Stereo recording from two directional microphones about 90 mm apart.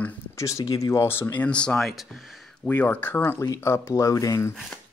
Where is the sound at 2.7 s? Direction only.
20° left (ahead or behind).